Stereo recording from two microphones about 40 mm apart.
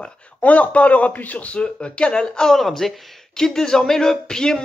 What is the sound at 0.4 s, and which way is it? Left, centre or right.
A man's voice, left.